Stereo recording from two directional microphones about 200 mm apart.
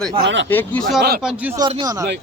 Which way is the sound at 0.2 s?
65° right (ahead or behind).